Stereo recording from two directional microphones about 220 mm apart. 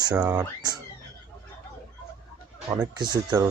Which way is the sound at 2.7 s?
15° right (ahead or behind).